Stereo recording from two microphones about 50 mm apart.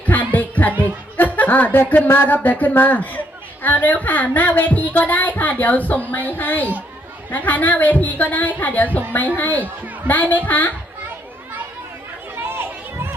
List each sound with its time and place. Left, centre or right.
0.0 s music: left
1.7 s a woman's voice: left
12.4 s children playing: right